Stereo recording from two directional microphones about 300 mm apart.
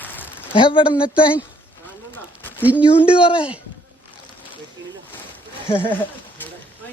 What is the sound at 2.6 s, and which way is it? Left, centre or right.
Speech, centre.